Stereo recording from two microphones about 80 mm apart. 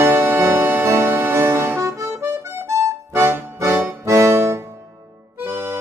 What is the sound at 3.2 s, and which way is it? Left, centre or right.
Music, right.